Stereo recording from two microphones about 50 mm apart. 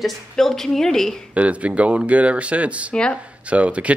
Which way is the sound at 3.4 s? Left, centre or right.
Right.